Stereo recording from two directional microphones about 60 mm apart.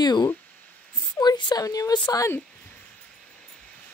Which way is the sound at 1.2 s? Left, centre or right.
Left.